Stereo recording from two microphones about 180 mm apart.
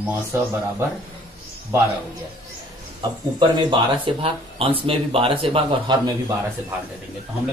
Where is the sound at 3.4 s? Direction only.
25° right (ahead or behind).